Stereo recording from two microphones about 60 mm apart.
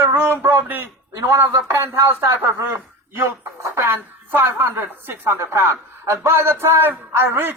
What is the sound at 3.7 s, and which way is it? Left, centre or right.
A man's voice, right.